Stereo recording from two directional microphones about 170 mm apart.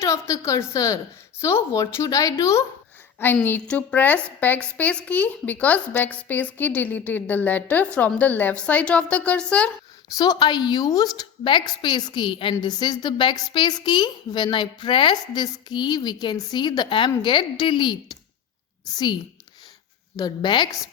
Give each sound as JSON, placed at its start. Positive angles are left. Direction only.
{"t": 0.0, "sound": "a woman's voice", "side_deg": 20}
{"t": 10.2, "sound": "a woman's voice", "side_deg": 25}